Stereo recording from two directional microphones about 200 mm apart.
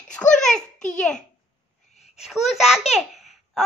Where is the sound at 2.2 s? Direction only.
Centre (ahead or behind).